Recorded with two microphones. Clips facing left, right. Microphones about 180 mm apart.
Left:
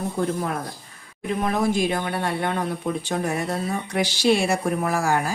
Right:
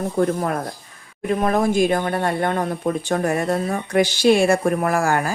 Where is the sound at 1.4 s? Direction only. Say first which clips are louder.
Right 4 dB; 50° right (ahead or behind).